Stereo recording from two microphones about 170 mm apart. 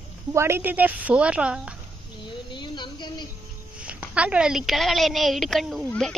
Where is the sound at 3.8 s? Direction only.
5° right (ahead or behind).